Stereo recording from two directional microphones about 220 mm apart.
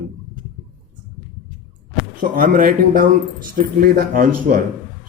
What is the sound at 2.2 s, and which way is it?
Speech, 40° right (ahead or behind).